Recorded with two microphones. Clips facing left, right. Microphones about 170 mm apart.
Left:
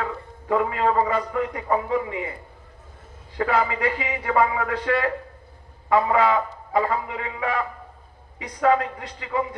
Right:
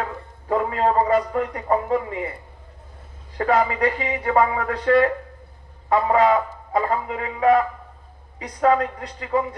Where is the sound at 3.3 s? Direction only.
40° right (ahead or behind).